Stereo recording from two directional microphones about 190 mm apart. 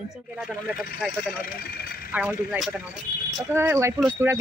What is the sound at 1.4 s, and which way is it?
Speech, 55° left (ahead or behind).